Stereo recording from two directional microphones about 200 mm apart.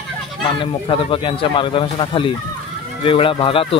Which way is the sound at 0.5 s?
25° left (ahead or behind).